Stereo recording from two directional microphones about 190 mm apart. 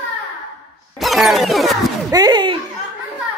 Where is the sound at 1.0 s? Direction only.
Centre (ahead or behind).